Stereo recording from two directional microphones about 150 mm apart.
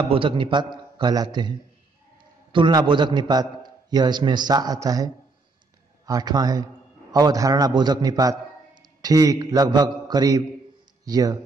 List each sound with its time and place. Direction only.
0.1 s a man's voice: 35° right (ahead or behind)